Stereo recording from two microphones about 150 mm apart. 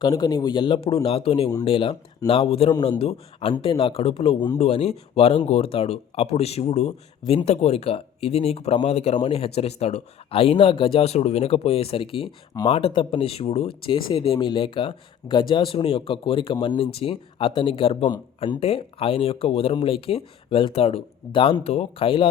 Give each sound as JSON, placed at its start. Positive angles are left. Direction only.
{"t": 0.0, "sound": "speech", "side_deg": 25}